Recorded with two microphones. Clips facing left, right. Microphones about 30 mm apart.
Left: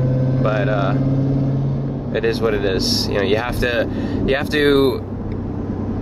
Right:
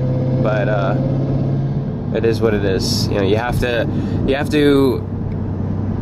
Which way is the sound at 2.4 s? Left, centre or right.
Centre.